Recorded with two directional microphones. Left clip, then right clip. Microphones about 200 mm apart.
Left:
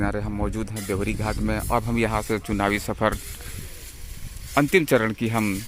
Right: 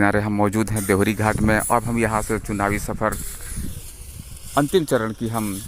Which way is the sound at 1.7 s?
5° right (ahead or behind).